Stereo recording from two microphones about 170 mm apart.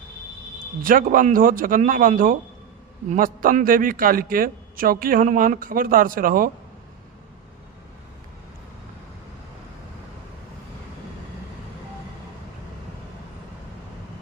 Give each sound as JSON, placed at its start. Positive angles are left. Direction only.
{"t": 0.8, "sound": "a man's voice", "side_deg": -55}